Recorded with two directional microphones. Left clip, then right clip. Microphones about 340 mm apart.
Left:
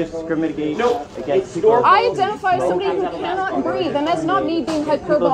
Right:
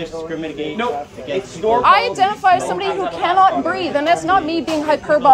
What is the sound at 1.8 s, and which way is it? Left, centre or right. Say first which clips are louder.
A woman's voice: right 5 dB; centre.